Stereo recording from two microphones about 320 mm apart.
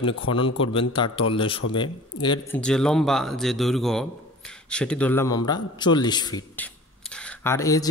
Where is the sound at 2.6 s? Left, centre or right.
Centre.